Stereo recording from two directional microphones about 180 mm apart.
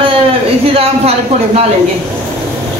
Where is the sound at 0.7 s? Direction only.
35° right (ahead or behind).